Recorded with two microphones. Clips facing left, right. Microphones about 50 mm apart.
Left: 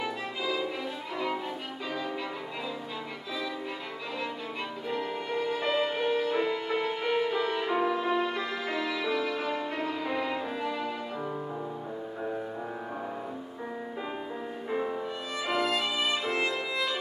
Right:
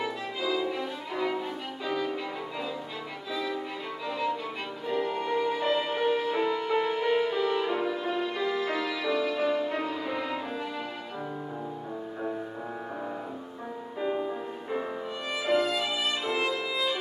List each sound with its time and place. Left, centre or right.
0.0 s music: centre
4.8 s music: centre
15.4 s violin: centre